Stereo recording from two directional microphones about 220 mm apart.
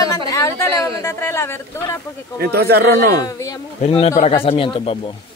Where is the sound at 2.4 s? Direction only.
45° right (ahead or behind).